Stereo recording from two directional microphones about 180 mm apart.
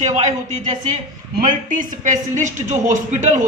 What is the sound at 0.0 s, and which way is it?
Speech, 40° right (ahead or behind).